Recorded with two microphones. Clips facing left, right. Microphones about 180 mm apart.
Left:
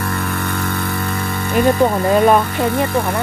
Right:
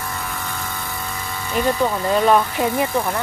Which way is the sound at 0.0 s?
65° left (ahead or behind).